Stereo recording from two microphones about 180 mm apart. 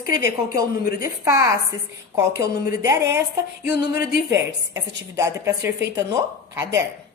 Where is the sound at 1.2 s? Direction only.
15° right (ahead or behind).